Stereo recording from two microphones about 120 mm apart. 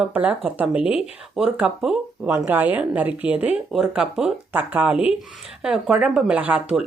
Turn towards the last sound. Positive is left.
turn(degrees=-10)  # may be behind; listen again after turning